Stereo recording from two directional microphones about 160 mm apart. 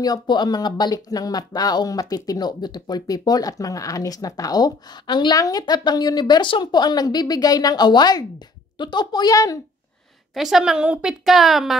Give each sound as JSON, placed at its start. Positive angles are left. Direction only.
{"t": 0.0, "sound": "speech", "side_deg": 25}
{"t": 10.3, "sound": "a woman's voice", "side_deg": 0}